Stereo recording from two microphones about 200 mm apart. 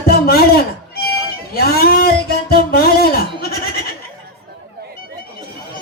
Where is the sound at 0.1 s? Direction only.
50° left (ahead or behind).